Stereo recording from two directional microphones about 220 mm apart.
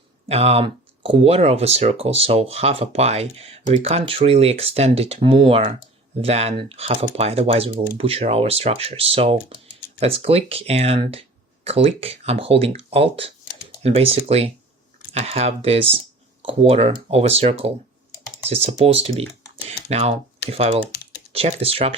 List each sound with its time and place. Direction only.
0.3 s speech: 25° right (ahead or behind)